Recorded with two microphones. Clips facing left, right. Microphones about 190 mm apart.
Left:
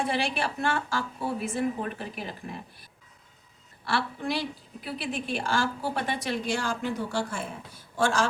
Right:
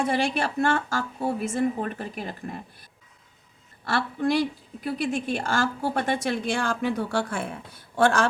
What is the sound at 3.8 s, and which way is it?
A woman's voice, 45° right (ahead or behind).